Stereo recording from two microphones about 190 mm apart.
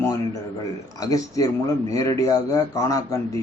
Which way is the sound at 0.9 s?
20° left (ahead or behind).